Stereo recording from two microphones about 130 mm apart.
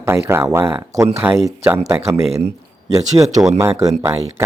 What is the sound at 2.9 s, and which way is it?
Speech, 25° right (ahead or behind).